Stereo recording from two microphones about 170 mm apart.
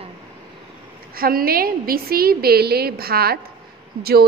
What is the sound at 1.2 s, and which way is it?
A woman's voice, 60° right (ahead or behind).